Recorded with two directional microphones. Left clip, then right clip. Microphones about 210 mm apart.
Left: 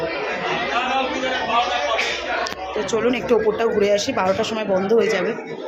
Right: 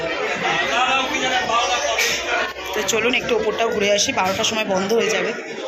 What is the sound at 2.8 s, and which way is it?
Speech, 20° left (ahead or behind).